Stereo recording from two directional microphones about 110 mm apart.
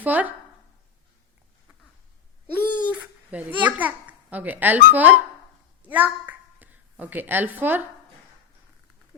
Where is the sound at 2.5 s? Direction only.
15° right (ahead or behind).